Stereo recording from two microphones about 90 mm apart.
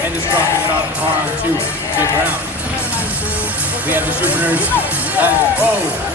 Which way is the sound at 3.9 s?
20° right (ahead or behind).